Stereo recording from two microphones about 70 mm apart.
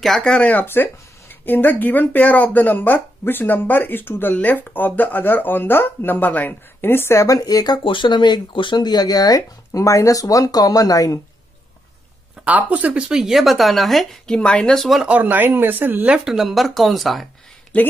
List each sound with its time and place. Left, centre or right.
0.2 s speech: centre; by 7.2 s left
7.2 s speech: left
9.7 s speech: left
12.4 s speech: centre
14.8 s speech: centre
15.0 s speech: right
16.3 s speech: centre
17.7 s speech: centre